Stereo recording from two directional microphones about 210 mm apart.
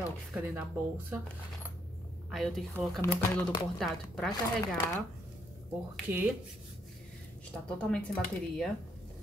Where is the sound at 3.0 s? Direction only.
20° left (ahead or behind).